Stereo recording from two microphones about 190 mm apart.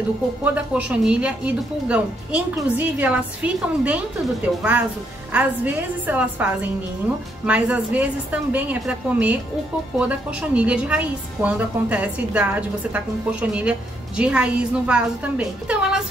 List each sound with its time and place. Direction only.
0.4 s a woman's voice: 5° right (ahead or behind)
5.3 s a woman's voice: 10° right (ahead or behind)